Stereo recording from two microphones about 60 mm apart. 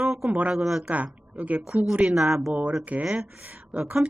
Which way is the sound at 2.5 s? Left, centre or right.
Right.